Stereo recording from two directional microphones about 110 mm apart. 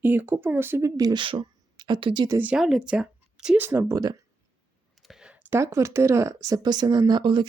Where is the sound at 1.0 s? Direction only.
35° right (ahead or behind).